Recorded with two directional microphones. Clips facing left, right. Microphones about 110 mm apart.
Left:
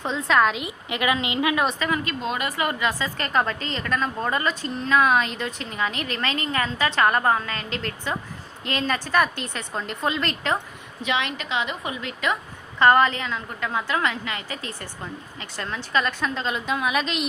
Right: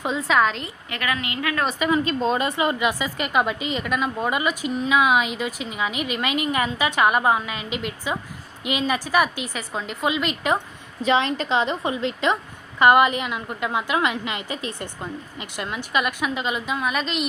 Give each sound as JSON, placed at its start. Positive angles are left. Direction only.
{"t": 0.0, "sound": "a woman's voice", "side_deg": -5}
{"t": 0.6, "sound": "a woman's voice", "side_deg": 20}
{"t": 1.8, "sound": "a woman's voice", "side_deg": -25}
{"t": 11.0, "sound": "a woman's voice", "side_deg": -35}
{"t": 12.8, "sound": "a woman's voice", "side_deg": -15}